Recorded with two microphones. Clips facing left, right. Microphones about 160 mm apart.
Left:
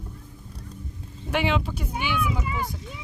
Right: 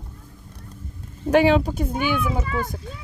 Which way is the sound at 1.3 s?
40° right (ahead or behind).